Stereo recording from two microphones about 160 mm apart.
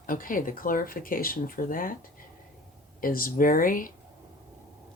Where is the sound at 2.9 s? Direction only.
65° left (ahead or behind).